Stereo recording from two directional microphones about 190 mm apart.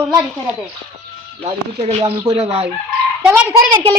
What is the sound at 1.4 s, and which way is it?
Speech, 30° right (ahead or behind).